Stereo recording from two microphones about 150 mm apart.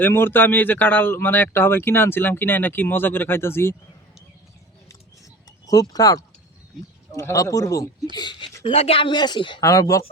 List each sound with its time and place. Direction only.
0.0 s speech: 15° left (ahead or behind)
5.6 s speech: 25° left (ahead or behind)
8.6 s speech: 40° left (ahead or behind); by 10.0 s 20° left (ahead or behind)